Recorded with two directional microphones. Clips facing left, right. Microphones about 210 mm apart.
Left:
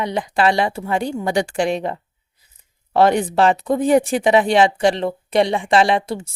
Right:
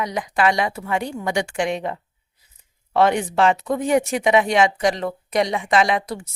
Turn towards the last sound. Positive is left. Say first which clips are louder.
# left 3 dB
turn(degrees=30)  # may be behind; listen again after turning